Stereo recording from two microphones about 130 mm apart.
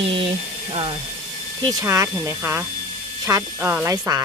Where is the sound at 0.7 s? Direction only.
45° right (ahead or behind).